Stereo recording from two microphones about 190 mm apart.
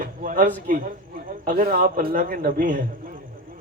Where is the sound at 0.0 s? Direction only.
45° right (ahead or behind).